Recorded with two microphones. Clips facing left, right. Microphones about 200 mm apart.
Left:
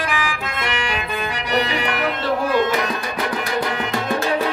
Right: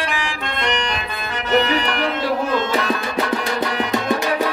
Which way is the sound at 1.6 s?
40° right (ahead or behind).